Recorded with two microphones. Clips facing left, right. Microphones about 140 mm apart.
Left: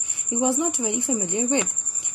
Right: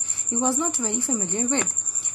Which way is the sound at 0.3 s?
15° left (ahead or behind).